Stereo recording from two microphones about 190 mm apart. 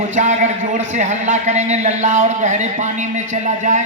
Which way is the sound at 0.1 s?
40° right (ahead or behind).